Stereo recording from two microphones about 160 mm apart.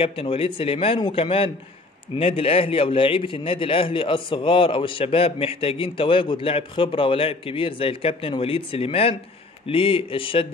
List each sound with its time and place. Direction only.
0.0 s a man's voice: 35° left (ahead or behind)